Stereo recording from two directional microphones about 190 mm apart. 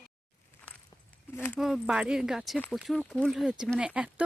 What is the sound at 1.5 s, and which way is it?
Speech, 5° right (ahead or behind).